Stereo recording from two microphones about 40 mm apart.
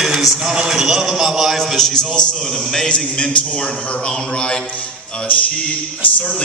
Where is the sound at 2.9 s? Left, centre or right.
Left.